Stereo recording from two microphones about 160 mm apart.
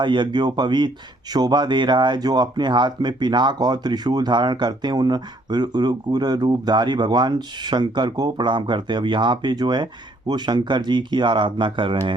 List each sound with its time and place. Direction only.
0.0 s speech: 30° right (ahead or behind)